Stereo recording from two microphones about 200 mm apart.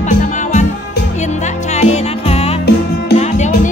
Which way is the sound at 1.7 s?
35° left (ahead or behind).